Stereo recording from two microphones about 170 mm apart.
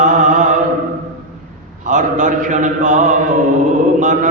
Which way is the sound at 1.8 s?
45° right (ahead or behind).